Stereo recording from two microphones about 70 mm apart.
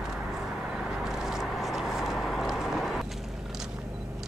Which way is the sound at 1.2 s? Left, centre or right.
Centre.